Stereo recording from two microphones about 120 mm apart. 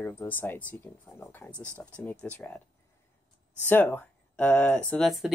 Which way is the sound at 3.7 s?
15° left (ahead or behind).